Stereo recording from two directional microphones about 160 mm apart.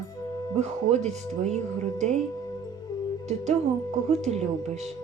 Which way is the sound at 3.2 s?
45° right (ahead or behind).